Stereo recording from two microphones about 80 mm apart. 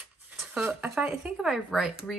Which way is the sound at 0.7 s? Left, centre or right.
Centre.